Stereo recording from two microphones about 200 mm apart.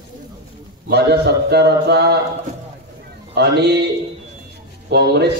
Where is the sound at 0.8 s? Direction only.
55° right (ahead or behind).